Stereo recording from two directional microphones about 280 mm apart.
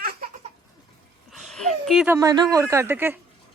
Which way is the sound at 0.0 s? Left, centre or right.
Right.